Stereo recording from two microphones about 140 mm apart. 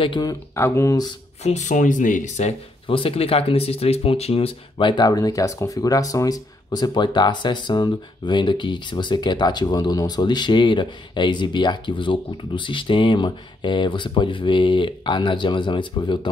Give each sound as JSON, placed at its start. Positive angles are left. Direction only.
{"t": 0.0, "sound": "speech", "side_deg": 30}
{"t": 1.4, "sound": "speech", "side_deg": 60}
{"t": 2.9, "sound": "speech", "side_deg": 40}